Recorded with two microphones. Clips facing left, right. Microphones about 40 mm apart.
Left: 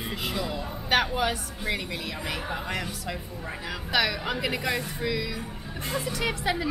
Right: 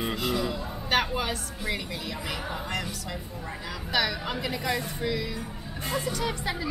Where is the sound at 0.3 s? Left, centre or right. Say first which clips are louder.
Right 2 dB; centre.